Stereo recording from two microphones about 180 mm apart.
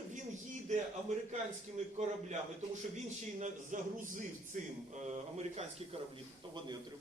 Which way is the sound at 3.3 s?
40° right (ahead or behind).